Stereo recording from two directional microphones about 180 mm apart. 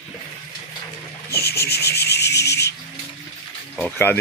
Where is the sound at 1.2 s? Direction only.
60° left (ahead or behind).